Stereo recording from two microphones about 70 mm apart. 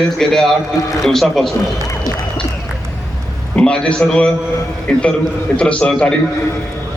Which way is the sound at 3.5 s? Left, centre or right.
Centre.